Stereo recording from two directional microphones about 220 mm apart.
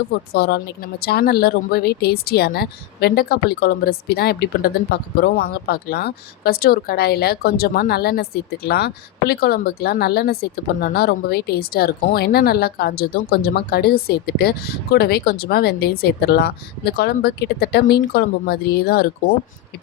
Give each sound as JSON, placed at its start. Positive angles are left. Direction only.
{"t": 0.1, "sound": "a woman's voice", "side_deg": 45}